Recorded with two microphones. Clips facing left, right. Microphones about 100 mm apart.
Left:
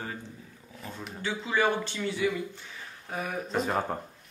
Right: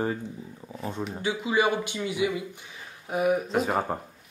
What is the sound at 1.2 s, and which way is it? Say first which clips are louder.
Speech: right 2 dB; 15° right (ahead or behind).